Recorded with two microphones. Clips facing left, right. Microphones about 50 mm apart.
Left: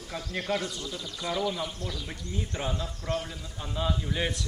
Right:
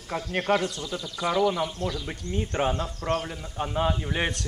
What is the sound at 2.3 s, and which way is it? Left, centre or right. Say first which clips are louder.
A man's voice: right 7 dB; right.